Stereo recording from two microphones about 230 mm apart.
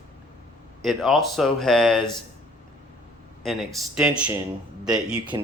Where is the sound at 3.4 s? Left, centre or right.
Centre.